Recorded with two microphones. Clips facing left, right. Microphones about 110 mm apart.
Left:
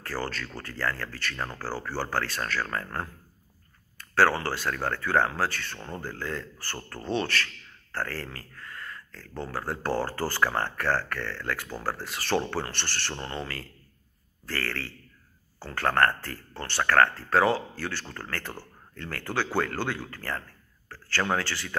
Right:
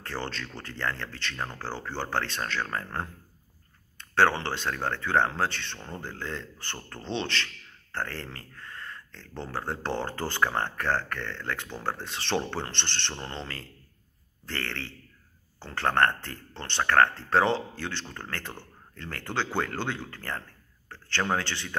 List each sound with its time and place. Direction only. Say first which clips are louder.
0.0 s speech: left 2 dB; 25° right (ahead or behind)
1.3 s speech: right 1 dB; centre (ahead or behind)
1.6 s speech: left 2 dB; 20° right (ahead or behind)
5.8 s speech: left 2 dB; 5° left (ahead or behind)
6.0 s speech: left 2 dB; 20° right (ahead or behind)